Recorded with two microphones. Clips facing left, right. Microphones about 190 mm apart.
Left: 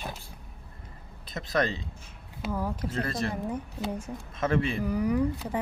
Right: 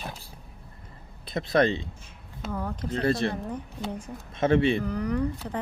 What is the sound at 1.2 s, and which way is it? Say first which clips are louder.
Speech: right 5 dB; 30° right (ahead or behind).